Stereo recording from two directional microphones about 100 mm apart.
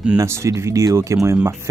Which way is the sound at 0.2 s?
30° right (ahead or behind).